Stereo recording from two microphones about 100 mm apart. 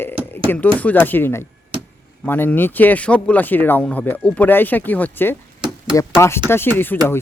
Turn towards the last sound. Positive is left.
turn(degrees=20)  # may be behind; listen again after turning